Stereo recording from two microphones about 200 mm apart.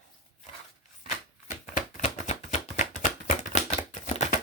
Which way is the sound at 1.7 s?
35° left (ahead or behind).